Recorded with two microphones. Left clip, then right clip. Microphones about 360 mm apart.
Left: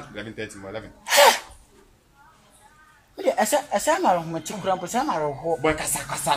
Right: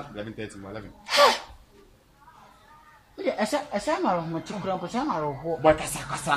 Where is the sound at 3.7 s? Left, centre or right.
Left.